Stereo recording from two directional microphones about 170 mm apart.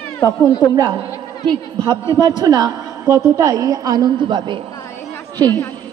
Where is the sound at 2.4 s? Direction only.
25° right (ahead or behind).